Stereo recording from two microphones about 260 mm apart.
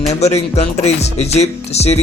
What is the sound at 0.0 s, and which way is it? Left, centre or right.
Music, left.